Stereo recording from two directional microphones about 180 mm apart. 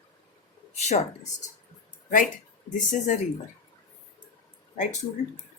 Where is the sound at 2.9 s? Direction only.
45° left (ahead or behind).